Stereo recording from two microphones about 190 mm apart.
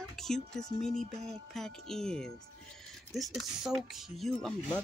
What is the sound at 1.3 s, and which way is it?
Speech, centre (ahead or behind).